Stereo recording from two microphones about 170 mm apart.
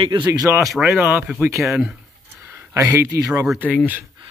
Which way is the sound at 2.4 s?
15° right (ahead or behind).